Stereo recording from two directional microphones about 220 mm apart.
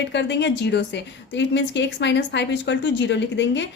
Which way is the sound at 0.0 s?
50° left (ahead or behind).